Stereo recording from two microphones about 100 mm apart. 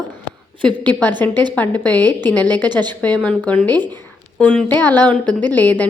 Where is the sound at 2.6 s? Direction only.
45° right (ahead or behind).